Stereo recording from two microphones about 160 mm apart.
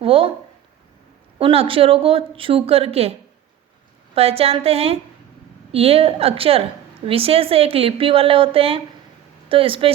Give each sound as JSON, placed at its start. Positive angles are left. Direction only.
{"t": 0.0, "sound": "speech", "side_deg": -35}
{"t": 1.4, "sound": "speech", "side_deg": -35}